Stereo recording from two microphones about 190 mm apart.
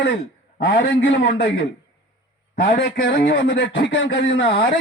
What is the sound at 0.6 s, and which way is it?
Speech, 70° left (ahead or behind).